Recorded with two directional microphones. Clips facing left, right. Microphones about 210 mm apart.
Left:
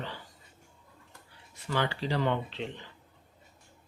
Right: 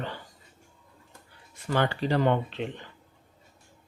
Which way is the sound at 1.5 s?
50° right (ahead or behind).